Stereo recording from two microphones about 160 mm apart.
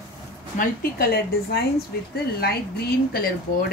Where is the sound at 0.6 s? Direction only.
70° left (ahead or behind).